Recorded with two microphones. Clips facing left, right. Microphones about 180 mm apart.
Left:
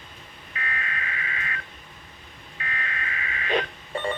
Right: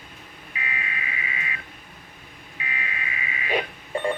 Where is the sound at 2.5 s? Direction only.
10° right (ahead or behind).